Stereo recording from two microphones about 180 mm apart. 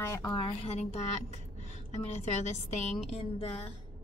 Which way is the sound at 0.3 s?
30° left (ahead or behind).